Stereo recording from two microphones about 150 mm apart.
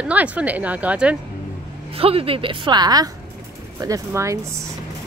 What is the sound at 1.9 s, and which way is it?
A woman's voice, 40° right (ahead or behind).